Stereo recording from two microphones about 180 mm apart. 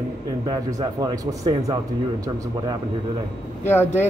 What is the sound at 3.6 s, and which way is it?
Speech, 10° left (ahead or behind).